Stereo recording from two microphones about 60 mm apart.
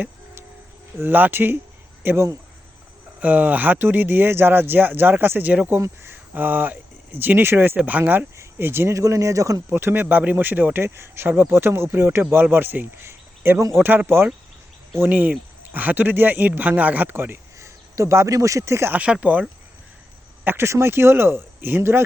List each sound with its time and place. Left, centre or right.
0.9 s speech: right
2.0 s speech: right
3.2 s speech: right
8.5 s speech: right
9.0 s speech: right
9.6 s speech: right
15.1 s speech: right
17.6 s a sound: right
18.3 s speech: right
18.9 s speech: right
20.4 s speech: right
20.7 s speech: right